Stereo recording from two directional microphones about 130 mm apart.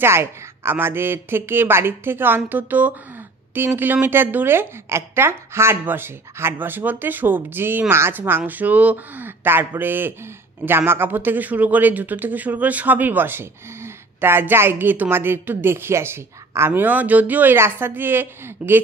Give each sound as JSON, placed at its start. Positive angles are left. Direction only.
{"t": 0.0, "sound": "speech", "side_deg": -20}